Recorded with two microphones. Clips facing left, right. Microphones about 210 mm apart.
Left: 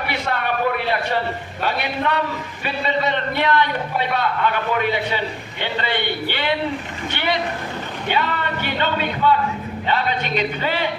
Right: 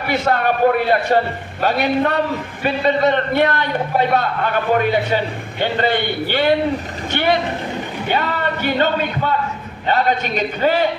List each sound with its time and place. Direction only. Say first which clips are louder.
0.1 s a man's voice: right 8 dB; 45° right (ahead or behind)